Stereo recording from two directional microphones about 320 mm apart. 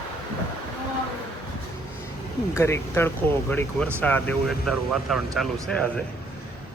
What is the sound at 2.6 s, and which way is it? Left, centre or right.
Speech, centre.